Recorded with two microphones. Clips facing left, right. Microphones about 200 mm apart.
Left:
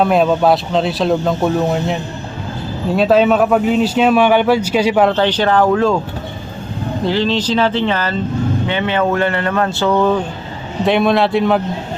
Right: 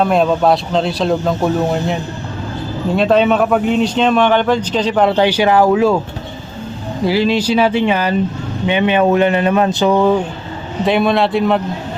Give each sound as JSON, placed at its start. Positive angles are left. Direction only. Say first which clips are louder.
{"t": 0.0, "sound": "a man's voice", "louder": "even", "side_deg": 5}
{"t": 5.1, "sound": "speech", "louder": "right 2 dB", "side_deg": -10}
{"t": 7.0, "sound": "speech", "louder": "right 3 dB", "side_deg": -10}
{"t": 10.8, "sound": "speech", "louder": "even", "side_deg": 0}